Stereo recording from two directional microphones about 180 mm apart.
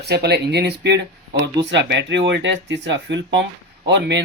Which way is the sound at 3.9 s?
75° right (ahead or behind).